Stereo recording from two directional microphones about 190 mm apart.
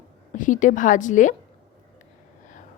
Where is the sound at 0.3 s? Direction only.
40° left (ahead or behind).